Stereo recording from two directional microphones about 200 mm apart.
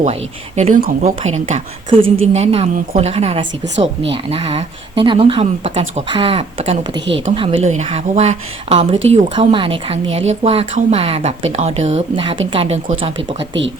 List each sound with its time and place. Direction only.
0.0 s a woman's voice: 35° right (ahead or behind)